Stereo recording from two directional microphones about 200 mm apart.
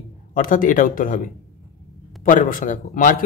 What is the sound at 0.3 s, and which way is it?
Speech, 40° left (ahead or behind).